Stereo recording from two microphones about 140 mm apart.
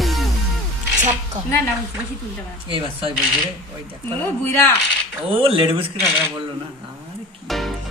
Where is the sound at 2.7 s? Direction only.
40° right (ahead or behind).